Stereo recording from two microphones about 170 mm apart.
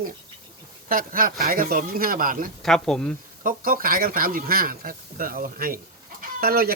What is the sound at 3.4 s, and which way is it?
Speech, 55° right (ahead or behind).